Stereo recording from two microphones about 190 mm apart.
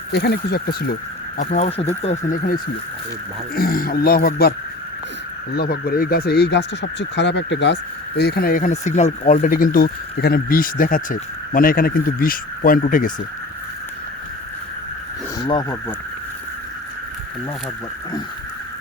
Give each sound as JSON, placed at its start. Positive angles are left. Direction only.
{"t": 0.1, "sound": "speech", "side_deg": 60}
{"t": 1.4, "sound": "speech", "side_deg": 40}
{"t": 3.5, "sound": "speech", "side_deg": 50}
{"t": 5.5, "sound": "speech", "side_deg": 50}
{"t": 15.4, "sound": "speech", "side_deg": 20}